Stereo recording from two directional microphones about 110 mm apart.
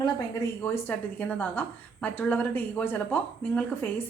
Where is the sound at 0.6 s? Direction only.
20° left (ahead or behind).